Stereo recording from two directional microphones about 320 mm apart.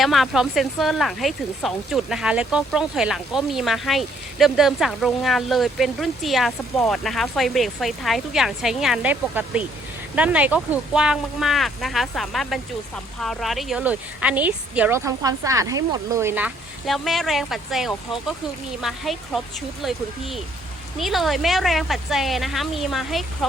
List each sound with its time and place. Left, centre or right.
0.0 s speech: centre